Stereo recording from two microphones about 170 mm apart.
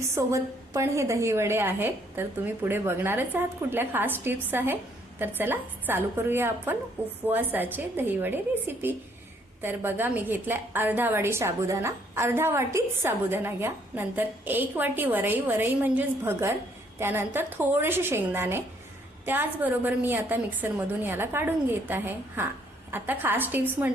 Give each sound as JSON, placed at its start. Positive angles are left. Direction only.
{"t": 0.1, "sound": "a woman's voice", "side_deg": -20}